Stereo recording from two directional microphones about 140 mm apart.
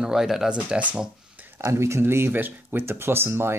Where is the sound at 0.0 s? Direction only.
5° right (ahead or behind).